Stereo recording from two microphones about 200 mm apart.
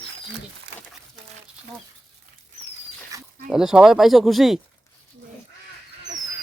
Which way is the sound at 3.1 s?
15° right (ahead or behind).